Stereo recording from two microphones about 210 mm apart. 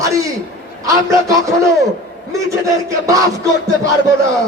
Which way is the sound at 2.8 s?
15° right (ahead or behind).